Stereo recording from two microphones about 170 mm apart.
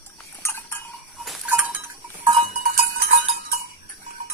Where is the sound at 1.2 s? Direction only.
Centre (ahead or behind).